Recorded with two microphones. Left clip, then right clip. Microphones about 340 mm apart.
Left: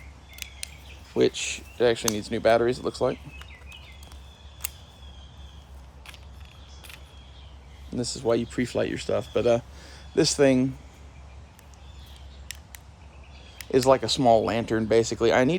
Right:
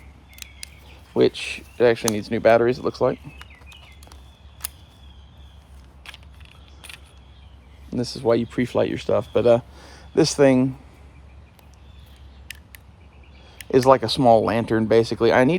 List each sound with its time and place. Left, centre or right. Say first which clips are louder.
1.2 s speech: right 4 dB; centre
7.9 s speech: right 5 dB; right
13.7 s speech: right 4 dB; centre